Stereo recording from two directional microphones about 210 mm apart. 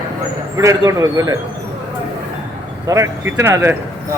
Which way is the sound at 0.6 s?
15° right (ahead or behind).